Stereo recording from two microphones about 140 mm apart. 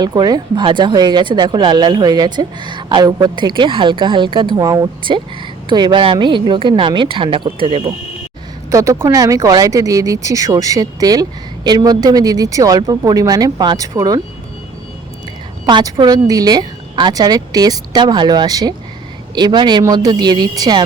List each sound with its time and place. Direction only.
0.0 s speech: 30° right (ahead or behind)
8.7 s speech: 20° right (ahead or behind)
15.6 s speech: 30° right (ahead or behind)